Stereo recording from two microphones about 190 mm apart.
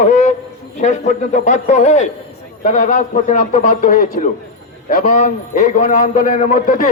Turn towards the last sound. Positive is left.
turn(degrees=45)  # may be behind; listen again after turning